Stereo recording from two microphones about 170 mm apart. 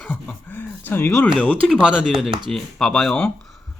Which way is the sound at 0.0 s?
10° left (ahead or behind).